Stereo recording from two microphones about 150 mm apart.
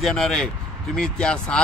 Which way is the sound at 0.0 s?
5° left (ahead or behind).